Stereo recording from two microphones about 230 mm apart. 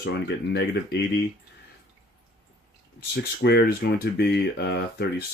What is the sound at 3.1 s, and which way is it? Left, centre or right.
Speech, left.